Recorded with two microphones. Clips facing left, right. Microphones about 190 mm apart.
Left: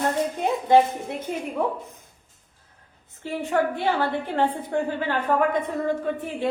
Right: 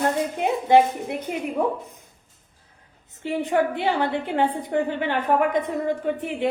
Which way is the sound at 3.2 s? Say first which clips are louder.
Right 2 dB; 15° right (ahead or behind).